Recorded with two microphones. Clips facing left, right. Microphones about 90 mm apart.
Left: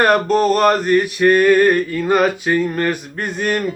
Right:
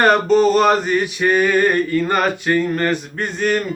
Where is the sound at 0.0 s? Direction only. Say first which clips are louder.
Right 1 dB; 5° left (ahead or behind).